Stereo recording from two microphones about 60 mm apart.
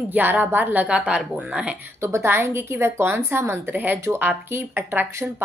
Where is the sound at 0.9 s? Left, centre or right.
Centre.